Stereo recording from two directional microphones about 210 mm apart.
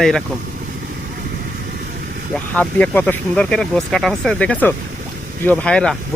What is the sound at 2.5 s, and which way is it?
Speech, 5° left (ahead or behind).